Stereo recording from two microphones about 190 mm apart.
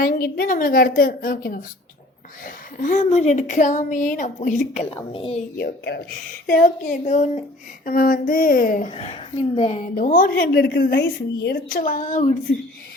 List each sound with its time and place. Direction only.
0.3 s a woman's voice: 45° left (ahead or behind)
2.7 s a woman's voice: 40° left (ahead or behind)
5.5 s speech: 60° left (ahead or behind)
6.5 s a woman's voice: 45° left (ahead or behind)